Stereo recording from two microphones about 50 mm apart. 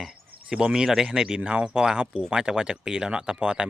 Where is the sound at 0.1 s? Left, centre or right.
Centre.